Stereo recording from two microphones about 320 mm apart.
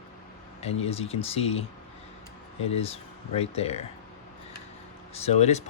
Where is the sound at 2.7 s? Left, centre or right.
Centre.